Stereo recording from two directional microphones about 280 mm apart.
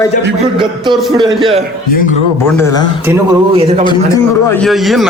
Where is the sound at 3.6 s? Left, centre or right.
Right.